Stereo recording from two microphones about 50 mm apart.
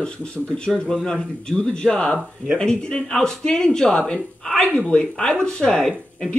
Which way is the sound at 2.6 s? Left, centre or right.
Centre.